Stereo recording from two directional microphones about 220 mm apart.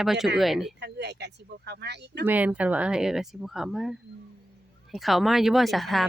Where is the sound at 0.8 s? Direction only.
50° right (ahead or behind).